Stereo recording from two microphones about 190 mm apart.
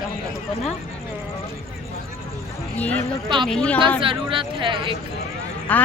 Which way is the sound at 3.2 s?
25° right (ahead or behind).